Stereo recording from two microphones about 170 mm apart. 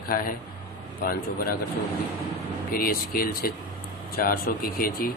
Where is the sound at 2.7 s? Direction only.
60° left (ahead or behind).